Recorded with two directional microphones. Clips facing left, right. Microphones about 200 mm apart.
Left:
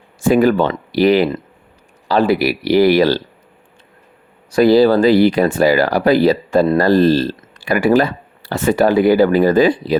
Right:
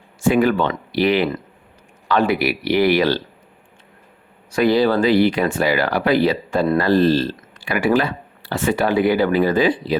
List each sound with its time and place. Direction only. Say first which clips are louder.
0.2 s speech: left 4 dB; 40° left (ahead or behind)
4.5 s speech: left 6 dB; 35° left (ahead or behind)